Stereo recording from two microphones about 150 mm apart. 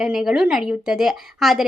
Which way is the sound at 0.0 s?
5° right (ahead or behind).